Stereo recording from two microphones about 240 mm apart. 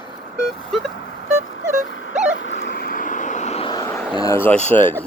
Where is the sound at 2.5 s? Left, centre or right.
Left.